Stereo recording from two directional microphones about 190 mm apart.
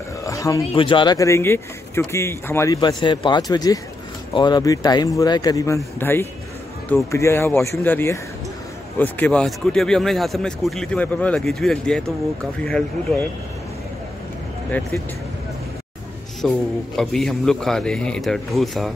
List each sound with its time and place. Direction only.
0.2 s speech: 15° left (ahead or behind)
16.3 s speech: centre (ahead or behind)